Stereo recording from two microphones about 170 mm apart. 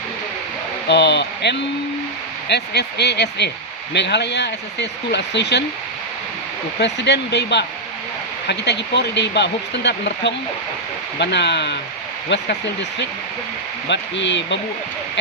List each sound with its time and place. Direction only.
0.9 s speech: 85° left
6.7 s speech: 90° left
13.8 s speech: 90° left